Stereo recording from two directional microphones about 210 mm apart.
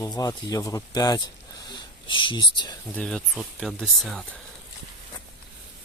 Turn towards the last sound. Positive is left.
turn(degrees=0)  # may be behind; listen again after turning